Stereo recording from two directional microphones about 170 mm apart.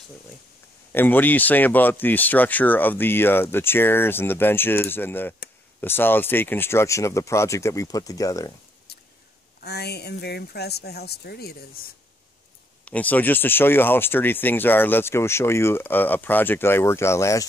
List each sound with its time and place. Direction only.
0.9 s speech: 10° left (ahead or behind)
8.9 s a sound: 70° left (ahead or behind)
9.6 s speech: 75° left (ahead or behind)
12.8 s speech: 10° left (ahead or behind)